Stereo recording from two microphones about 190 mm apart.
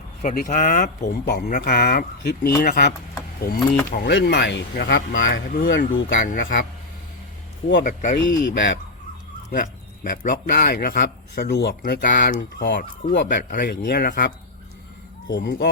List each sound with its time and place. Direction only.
0.2 s a man's voice: 40° left (ahead or behind)
1.2 s a man's voice: 60° left (ahead or behind)
4.1 s speech: 65° left (ahead or behind)
4.7 s speech: 55° left (ahead or behind)
5.9 s speech: 75° left (ahead or behind)
6.1 s a man's voice: 45° left (ahead or behind)
7.8 s a man's voice: 45° left (ahead or behind)
8.2 s speech: 65° left (ahead or behind)
9.5 s a man's voice: 45° left (ahead or behind); by 13.2 s 65° left (ahead or behind)
13.2 s a man's voice: 45° left (ahead or behind)
15.3 s speech: 65° left (ahead or behind)